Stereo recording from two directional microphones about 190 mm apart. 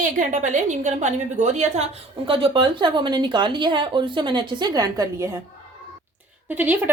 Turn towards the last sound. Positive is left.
turn(degrees=-10)  # may be behind; listen again after turning